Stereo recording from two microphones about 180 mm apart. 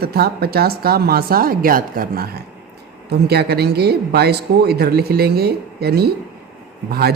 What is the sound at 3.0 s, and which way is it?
Speech, 65° right (ahead or behind).